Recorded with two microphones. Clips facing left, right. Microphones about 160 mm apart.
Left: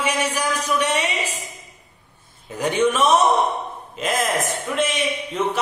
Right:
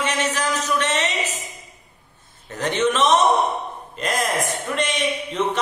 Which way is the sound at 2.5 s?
10° left (ahead or behind).